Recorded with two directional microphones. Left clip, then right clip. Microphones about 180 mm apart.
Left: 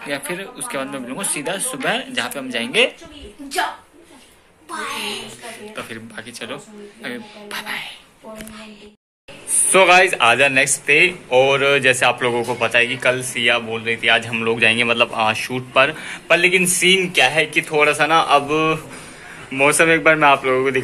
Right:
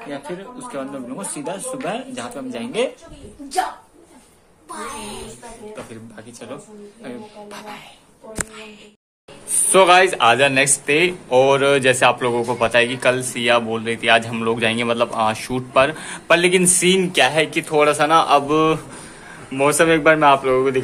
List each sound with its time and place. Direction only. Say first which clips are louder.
0.1 s speech: left 6 dB; 5° left (ahead or behind)
6.1 s speech: left 4 dB; 5° right (ahead or behind)
9.7 s speech: even; 15° right (ahead or behind)
10.9 s a man's voice: left 3 dB; 20° right (ahead or behind)
19.5 s speech: left 1 dB; 10° right (ahead or behind)